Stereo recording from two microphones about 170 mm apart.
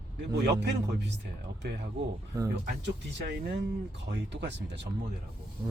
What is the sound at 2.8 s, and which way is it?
Speech, 90° right.